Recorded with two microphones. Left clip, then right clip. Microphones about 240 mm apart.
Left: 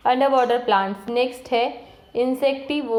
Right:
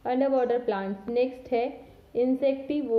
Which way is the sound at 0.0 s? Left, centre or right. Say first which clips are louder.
Left 7 dB; centre.